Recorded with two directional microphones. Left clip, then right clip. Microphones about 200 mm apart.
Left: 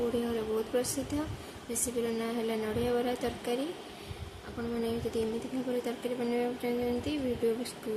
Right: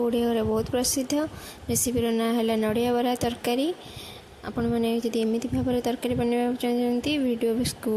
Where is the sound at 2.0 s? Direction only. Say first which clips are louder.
Right 10 dB; 50° right (ahead or behind).